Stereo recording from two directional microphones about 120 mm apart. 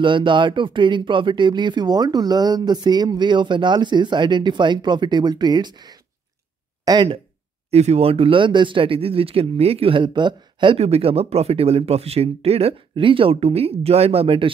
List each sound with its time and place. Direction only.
0.0 s speech: 45° right (ahead or behind)
6.8 s a sound: 35° right (ahead or behind)
7.7 s a man's voice: 60° right (ahead or behind); by 10.8 s 40° right (ahead or behind)
10.8 s speech: 55° right (ahead or behind)